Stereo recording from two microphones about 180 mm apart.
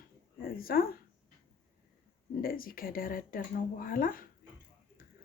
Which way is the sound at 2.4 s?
55° left (ahead or behind).